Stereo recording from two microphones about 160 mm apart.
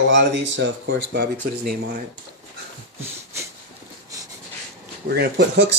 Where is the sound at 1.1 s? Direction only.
70° right (ahead or behind).